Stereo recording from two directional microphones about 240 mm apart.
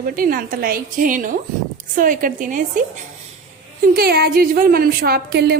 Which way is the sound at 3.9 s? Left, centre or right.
Right.